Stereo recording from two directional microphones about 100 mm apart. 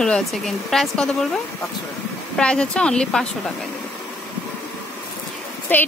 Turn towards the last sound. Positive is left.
turn(degrees=20)  # may be behind; listen again after turning